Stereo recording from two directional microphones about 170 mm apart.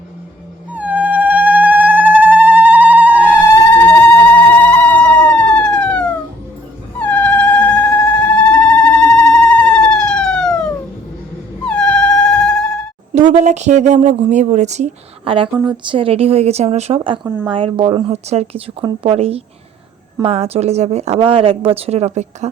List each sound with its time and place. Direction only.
0.7 s cat: 10° right (ahead or behind)
3.5 s a sound: 15° left (ahead or behind)
7.0 s cat: 10° left (ahead or behind)
13.4 s a woman's voice: 45° right (ahead or behind)
17.2 s speech: 10° right (ahead or behind)
17.5 s speech: 30° right (ahead or behind)